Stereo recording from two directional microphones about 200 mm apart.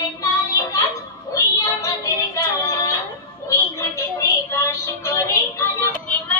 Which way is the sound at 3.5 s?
15° left (ahead or behind).